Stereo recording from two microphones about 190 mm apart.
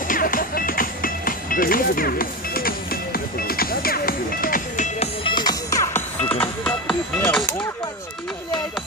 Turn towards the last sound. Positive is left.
turn(degrees=5)  # may be behind; listen again after turning